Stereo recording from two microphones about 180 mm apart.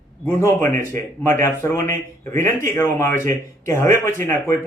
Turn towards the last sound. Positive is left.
turn(degrees=15)  # may be behind; listen again after turning